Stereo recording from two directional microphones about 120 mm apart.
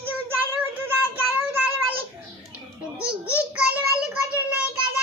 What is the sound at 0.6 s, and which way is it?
Child singing, 15° right (ahead or behind).